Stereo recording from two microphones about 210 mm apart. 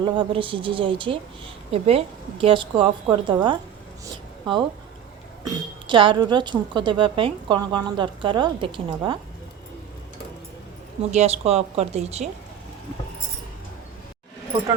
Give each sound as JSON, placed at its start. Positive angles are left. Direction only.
{"t": 0.0, "sound": "a woman's voice", "side_deg": -25}
{"t": 4.0, "sound": "a sound", "side_deg": -25}
{"t": 5.5, "sound": "a woman's voice", "side_deg": -20}
{"t": 11.1, "sound": "speech", "side_deg": -30}